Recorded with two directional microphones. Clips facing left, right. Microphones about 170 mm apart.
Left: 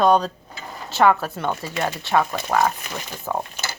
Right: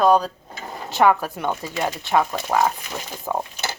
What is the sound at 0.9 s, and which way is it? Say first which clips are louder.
Speech: even; 15° right (ahead or behind).